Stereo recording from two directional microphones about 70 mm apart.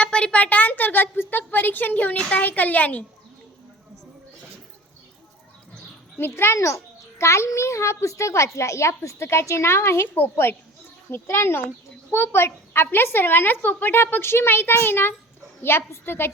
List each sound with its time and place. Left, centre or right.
0.0 s a woman's voice: centre
6.1 s a child's voice: left